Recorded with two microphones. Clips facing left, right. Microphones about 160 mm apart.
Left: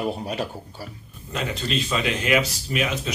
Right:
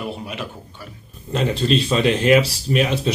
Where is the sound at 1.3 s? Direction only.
30° right (ahead or behind).